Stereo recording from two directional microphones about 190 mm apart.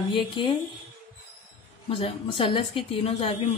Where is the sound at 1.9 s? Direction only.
30° left (ahead or behind).